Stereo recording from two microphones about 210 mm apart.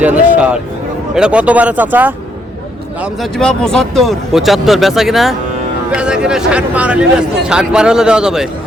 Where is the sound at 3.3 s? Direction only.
5° left (ahead or behind).